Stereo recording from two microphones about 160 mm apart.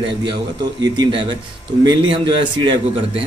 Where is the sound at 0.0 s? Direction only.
30° right (ahead or behind).